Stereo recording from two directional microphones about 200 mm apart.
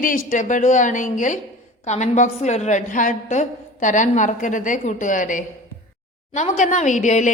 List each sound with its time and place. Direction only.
0.3 s a woman's voice: 40° left (ahead or behind)